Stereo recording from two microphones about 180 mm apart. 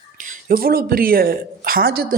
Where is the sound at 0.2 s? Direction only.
50° right (ahead or behind).